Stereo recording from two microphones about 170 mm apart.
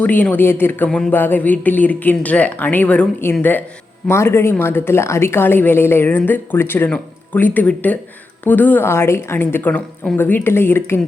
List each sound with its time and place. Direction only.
0.0 s a woman's voice: 10° left (ahead or behind)